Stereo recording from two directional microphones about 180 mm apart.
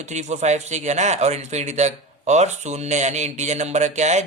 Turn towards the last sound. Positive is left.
turn(degrees=-40)  # may be behind; listen again after turning